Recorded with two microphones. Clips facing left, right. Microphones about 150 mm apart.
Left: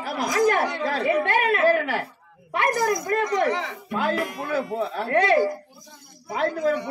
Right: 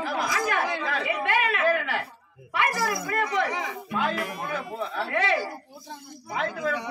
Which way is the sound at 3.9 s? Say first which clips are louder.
Left 4 dB; 40° left (ahead or behind).